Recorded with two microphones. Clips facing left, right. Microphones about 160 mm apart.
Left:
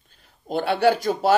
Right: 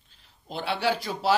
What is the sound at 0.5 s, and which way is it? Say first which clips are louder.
Speech: left 8 dB; 50° left (ahead or behind).